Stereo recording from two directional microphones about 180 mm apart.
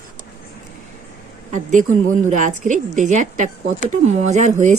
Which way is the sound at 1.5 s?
45° right (ahead or behind).